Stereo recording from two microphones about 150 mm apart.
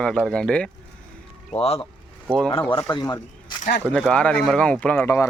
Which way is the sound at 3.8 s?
5° left (ahead or behind).